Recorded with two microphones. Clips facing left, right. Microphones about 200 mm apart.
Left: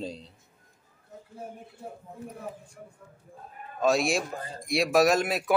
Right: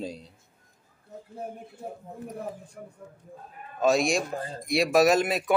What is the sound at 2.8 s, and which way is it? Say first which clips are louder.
Speech: right 4 dB; 55° right (ahead or behind).